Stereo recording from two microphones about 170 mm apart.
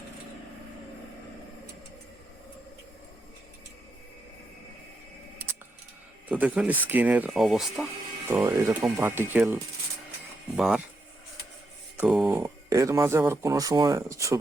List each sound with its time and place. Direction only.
6.2 s speech: 10° right (ahead or behind)
8.3 s speech: 15° right (ahead or behind)
10.6 s speech: 5° right (ahead or behind)
11.9 s speech: 5° right (ahead or behind)
12.4 s speech: 15° right (ahead or behind)